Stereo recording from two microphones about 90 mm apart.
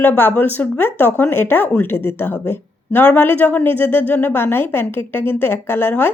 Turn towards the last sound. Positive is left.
turn(degrees=20)  # may be behind; listen again after turning